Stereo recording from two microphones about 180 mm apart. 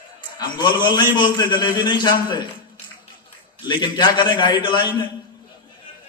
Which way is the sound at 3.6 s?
25° left (ahead or behind).